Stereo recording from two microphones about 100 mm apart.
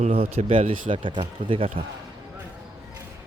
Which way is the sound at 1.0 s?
55° right (ahead or behind).